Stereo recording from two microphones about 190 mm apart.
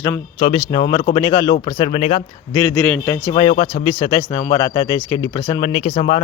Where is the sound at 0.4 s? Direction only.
25° left (ahead or behind).